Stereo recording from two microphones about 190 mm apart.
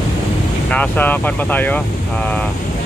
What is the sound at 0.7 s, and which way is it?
Speech, 10° left (ahead or behind).